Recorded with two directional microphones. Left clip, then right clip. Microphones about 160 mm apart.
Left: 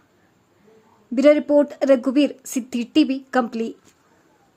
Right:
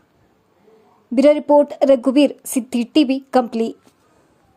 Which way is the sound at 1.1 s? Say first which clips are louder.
Right 3 dB; 15° right (ahead or behind).